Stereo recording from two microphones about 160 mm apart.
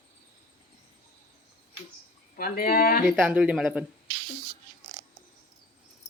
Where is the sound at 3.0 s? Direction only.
10° right (ahead or behind).